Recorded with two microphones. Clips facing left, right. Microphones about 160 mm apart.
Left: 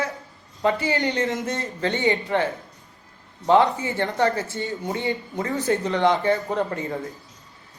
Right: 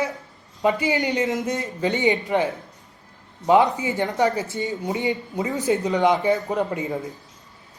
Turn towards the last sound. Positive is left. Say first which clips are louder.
# right 1 dB
turn(degrees=-15)  # may be behind; listen again after turning